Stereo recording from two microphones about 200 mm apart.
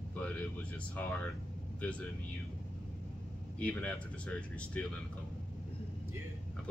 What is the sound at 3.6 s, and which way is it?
Speech, 5° left (ahead or behind).